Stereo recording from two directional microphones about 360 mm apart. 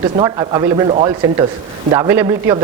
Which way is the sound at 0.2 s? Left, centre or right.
Centre.